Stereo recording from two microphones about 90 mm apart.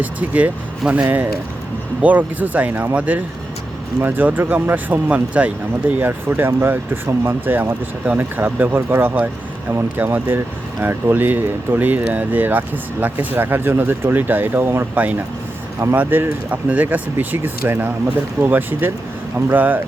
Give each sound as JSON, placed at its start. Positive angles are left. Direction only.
{"t": 0.0, "sound": "speech", "side_deg": -15}